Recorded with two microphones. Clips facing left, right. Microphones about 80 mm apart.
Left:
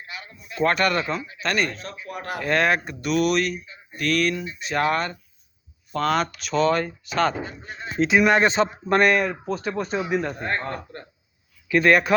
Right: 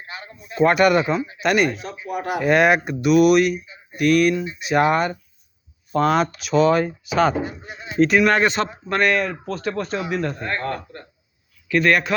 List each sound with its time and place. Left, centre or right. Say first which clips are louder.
0.0 s speech: right 2 dB; right
0.6 s speech: right 6 dB; centre
8.0 s speech: right 1 dB; centre; by 12.1 s left